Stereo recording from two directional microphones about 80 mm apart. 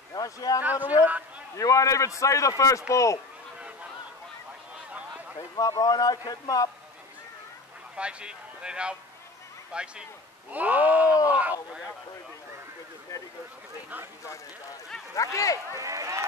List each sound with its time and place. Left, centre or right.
0.1 s speech: left
0.6 s a sound: right
1.6 s speech: left
5.6 s speech: left
7.9 s a man's voice: centre
10.5 s a sound: centre
15.1 s speech: left
15.7 s speech: right